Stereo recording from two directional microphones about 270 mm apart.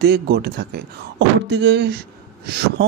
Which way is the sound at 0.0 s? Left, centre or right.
Right.